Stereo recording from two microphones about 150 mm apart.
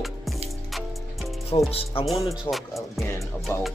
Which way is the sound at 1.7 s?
40° left (ahead or behind).